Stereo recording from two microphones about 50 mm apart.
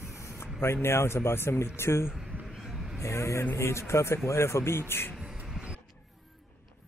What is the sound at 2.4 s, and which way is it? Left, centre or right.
Vehicle, centre.